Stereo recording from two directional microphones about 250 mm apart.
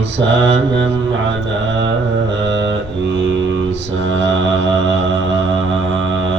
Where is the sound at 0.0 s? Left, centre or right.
Right.